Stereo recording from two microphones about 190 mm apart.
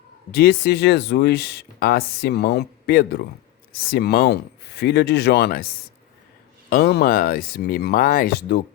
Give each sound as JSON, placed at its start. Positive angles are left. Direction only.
{"t": 0.3, "sound": "speech", "side_deg": 60}
{"t": 6.7, "sound": "speech", "side_deg": 55}